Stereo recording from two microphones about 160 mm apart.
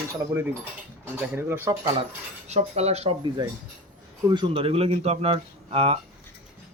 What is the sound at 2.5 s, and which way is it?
Speech, 40° right (ahead or behind).